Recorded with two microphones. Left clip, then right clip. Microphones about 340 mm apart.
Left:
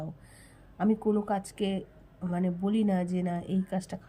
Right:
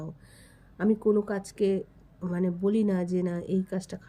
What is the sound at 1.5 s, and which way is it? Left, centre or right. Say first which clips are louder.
Speech: right 6 dB; centre.